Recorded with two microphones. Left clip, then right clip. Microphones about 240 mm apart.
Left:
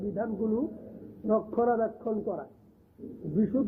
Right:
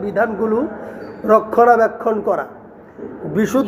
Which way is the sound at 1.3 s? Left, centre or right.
Centre.